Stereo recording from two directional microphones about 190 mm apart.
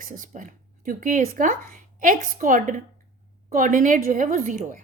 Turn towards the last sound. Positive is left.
turn(degrees=-40)  # may be behind; listen again after turning